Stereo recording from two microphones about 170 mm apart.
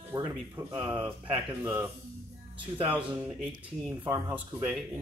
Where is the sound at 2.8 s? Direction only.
10° right (ahead or behind).